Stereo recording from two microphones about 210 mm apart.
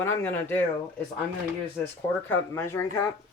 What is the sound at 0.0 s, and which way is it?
Speech, 10° left (ahead or behind).